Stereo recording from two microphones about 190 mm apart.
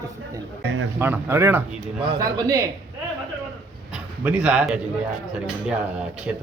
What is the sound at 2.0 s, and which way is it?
Speech, 20° right (ahead or behind).